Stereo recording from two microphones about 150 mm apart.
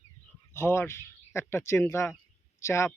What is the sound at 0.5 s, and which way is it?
Speech, 15° left (ahead or behind).